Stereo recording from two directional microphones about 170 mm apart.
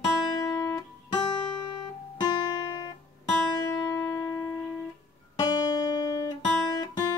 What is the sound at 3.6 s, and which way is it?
Music, 20° left (ahead or behind).